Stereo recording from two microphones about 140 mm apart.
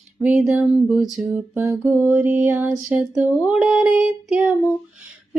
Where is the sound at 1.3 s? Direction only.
15° right (ahead or behind).